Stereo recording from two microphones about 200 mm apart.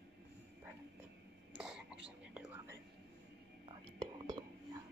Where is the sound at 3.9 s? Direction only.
20° right (ahead or behind).